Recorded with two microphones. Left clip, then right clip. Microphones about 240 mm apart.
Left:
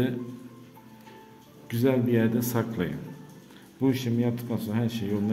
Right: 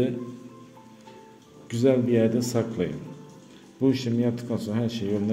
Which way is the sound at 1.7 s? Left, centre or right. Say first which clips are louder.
Right 3 dB; centre.